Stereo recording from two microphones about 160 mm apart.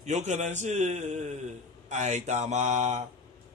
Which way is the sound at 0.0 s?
45° right (ahead or behind).